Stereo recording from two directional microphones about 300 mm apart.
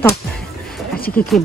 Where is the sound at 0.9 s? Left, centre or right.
Left.